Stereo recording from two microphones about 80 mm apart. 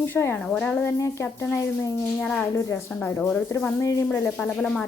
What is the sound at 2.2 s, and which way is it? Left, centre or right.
Speech, centre.